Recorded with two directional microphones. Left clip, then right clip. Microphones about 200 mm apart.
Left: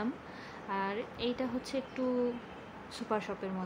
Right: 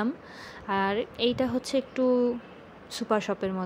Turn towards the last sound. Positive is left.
turn(degrees=-30)  # may be behind; listen again after turning